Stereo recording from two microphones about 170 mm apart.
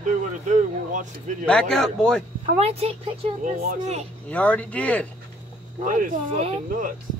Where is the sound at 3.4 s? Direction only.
50° right (ahead or behind).